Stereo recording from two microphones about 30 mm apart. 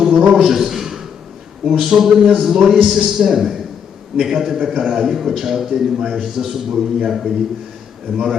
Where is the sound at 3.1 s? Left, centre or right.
Centre.